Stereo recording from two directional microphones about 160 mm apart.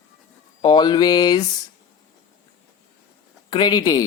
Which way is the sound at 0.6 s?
25° left (ahead or behind).